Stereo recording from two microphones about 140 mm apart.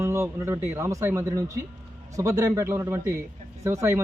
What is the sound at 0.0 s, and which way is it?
Speech, 20° right (ahead or behind).